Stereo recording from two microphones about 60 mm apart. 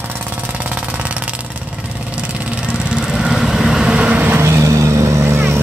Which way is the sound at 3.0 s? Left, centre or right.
Centre.